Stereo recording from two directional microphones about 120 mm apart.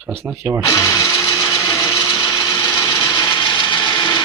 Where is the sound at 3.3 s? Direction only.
40° left (ahead or behind).